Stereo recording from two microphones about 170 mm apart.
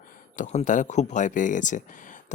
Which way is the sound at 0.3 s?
45° left (ahead or behind).